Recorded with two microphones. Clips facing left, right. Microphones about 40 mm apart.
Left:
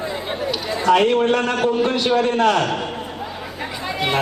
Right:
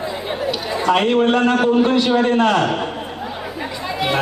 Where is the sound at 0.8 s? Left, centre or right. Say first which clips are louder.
Even; right.